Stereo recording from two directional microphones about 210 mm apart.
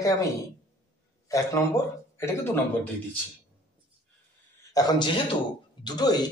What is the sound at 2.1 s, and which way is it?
Speech, 10° left (ahead or behind).